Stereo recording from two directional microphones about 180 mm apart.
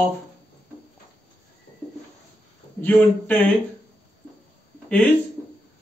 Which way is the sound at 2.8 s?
10° left (ahead or behind).